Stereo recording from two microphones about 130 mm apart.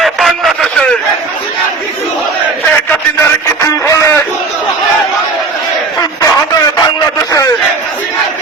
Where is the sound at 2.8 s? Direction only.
20° left (ahead or behind).